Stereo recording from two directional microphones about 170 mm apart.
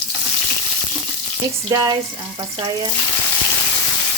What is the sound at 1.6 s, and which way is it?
Frying, 20° right (ahead or behind).